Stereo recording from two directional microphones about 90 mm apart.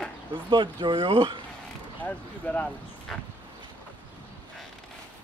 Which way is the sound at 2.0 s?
15° left (ahead or behind).